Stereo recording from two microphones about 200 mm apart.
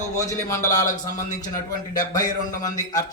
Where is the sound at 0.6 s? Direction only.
40° left (ahead or behind).